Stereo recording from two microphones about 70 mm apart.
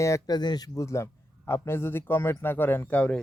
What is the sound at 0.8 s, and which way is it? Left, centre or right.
A man's voice, left.